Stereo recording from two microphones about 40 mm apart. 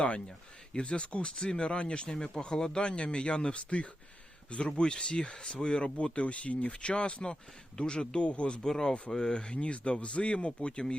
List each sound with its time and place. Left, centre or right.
0.7 s speech: left
8.6 s speech: centre